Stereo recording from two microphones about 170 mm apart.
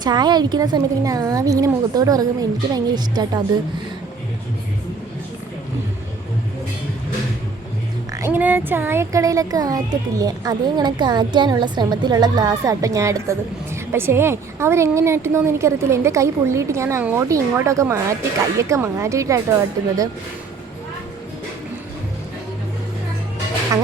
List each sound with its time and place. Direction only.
0.0 s speech: 25° right (ahead or behind)
8.1 s a woman's voice: 15° right (ahead or behind)